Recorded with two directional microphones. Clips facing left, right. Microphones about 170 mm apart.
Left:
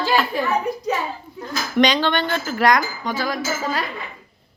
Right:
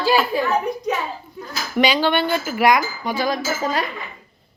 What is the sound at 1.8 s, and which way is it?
Speech, 10° right (ahead or behind).